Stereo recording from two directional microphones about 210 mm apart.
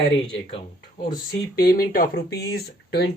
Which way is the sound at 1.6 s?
45° left (ahead or behind).